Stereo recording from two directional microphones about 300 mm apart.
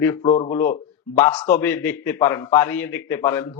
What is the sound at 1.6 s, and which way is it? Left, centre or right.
A man's voice, centre.